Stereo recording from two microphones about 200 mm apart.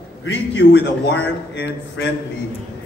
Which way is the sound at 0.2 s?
65° left (ahead or behind).